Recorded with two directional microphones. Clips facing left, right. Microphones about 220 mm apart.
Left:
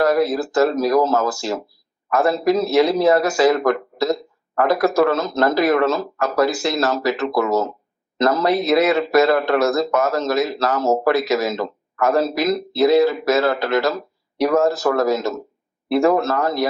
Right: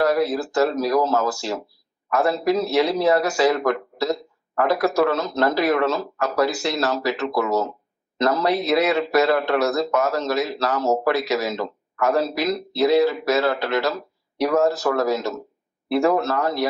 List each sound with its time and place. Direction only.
0.0 s a man's voice: 45° left (ahead or behind)